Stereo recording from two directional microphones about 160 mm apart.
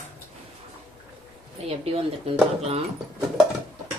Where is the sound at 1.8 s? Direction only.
40° right (ahead or behind).